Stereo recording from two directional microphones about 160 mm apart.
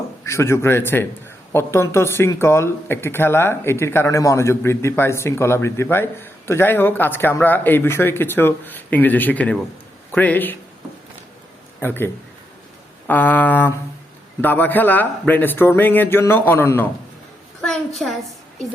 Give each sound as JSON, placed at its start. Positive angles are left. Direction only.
{"t": 0.3, "sound": "speech", "side_deg": 15}
{"t": 11.8, "sound": "speech", "side_deg": 15}
{"t": 17.6, "sound": "a woman's voice", "side_deg": 0}